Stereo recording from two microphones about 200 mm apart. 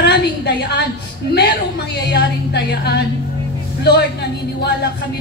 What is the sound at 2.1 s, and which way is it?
Speech, 60° left (ahead or behind).